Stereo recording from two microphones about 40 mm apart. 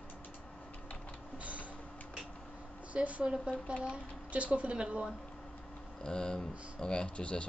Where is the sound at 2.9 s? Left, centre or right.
Right.